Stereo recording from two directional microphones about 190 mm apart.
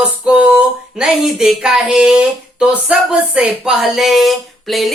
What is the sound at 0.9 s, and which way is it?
Speech, 5° right (ahead or behind).